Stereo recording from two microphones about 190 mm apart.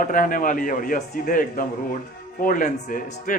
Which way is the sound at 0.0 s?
45° left (ahead or behind).